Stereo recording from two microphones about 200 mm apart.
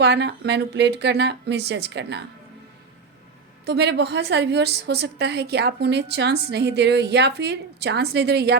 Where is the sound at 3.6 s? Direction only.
55° right (ahead or behind).